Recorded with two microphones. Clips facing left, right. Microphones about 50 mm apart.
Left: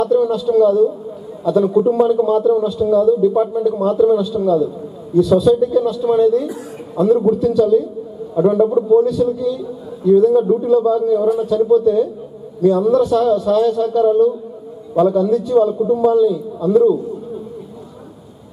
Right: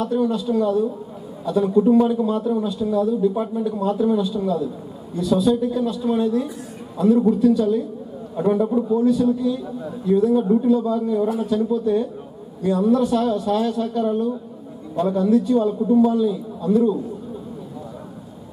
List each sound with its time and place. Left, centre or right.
0.0 s a man's voice: centre
7.0 s a man's voice: centre
7.3 s a man's voice: centre
8.4 s a man's voice: centre
9.0 s a man's voice: centre